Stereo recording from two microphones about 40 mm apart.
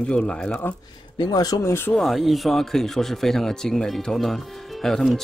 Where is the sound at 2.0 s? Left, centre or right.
Centre.